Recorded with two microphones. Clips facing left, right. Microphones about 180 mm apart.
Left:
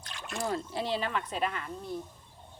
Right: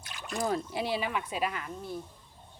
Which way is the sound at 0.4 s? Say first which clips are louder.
Right 1 dB; 15° right (ahead or behind).